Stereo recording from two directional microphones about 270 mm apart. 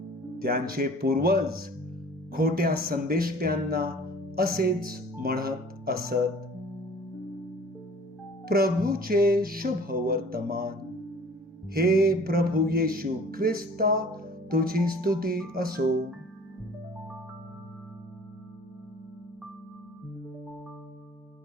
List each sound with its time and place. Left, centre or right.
0.3 s music: right
5.2 s speech: right
8.4 s music: right